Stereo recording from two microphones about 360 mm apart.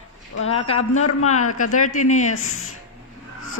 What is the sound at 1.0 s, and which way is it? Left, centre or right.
Speech, left.